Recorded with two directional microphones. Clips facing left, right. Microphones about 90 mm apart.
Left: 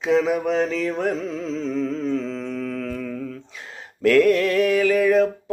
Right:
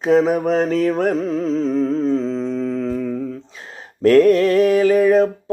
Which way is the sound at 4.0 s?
35° right (ahead or behind).